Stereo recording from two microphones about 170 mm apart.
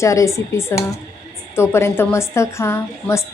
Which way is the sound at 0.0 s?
20° left (ahead or behind).